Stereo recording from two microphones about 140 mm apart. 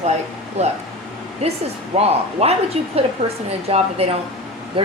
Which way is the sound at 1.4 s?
50° right (ahead or behind).